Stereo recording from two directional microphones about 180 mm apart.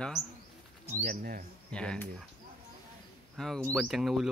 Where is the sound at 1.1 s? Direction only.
55° right (ahead or behind).